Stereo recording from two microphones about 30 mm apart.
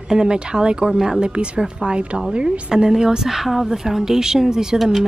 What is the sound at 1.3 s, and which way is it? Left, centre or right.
A woman's voice, right.